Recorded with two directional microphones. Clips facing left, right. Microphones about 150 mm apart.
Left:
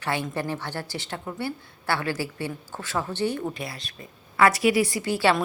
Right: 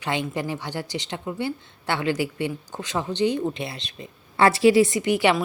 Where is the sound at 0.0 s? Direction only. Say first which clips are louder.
Right 1 dB; 15° right (ahead or behind).